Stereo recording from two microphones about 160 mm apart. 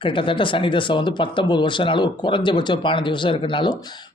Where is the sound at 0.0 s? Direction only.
30° left (ahead or behind).